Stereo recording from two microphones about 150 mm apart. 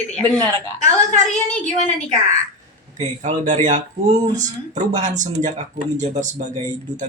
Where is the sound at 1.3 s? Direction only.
50° left (ahead or behind).